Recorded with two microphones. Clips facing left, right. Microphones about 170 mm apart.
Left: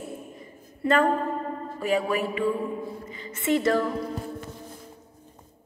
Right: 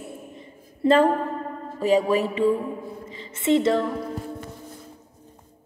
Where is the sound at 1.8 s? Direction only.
35° right (ahead or behind).